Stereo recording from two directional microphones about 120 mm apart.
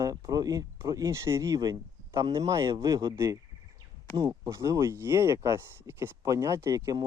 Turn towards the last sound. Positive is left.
turn(degrees=-30)  # may be behind; listen again after turning